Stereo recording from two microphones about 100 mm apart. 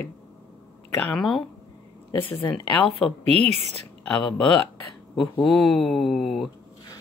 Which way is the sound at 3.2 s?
90° right.